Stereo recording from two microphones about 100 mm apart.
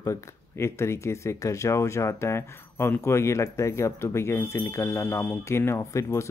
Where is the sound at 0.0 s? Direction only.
30° left (ahead or behind).